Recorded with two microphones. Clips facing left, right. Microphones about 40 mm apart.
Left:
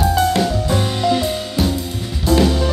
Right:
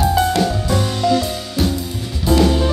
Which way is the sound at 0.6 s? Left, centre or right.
Left.